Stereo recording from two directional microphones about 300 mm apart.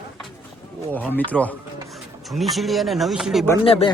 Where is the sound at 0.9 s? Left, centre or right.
Centre.